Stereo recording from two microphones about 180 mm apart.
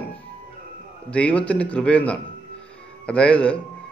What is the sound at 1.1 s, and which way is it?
Speech, 5° left (ahead or behind).